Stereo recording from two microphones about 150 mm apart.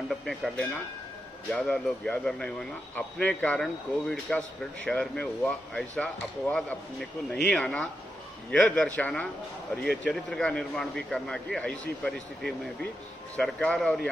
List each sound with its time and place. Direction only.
0.1 s a man's voice: centre (ahead or behind)